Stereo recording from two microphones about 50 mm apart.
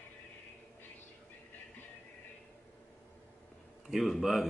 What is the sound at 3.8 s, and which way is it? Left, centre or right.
Speech, centre.